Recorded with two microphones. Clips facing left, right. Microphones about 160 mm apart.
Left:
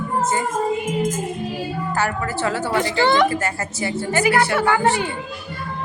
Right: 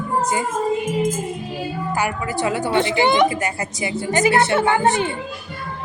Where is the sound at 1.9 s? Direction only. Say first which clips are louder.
Even; 15° right (ahead or behind).